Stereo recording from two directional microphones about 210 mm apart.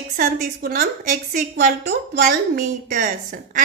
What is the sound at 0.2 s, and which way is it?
A woman's voice, 40° right (ahead or behind).